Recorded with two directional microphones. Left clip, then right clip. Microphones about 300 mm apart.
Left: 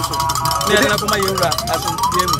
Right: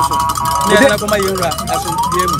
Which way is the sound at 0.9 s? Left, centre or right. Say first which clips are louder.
Right 3 dB; centre.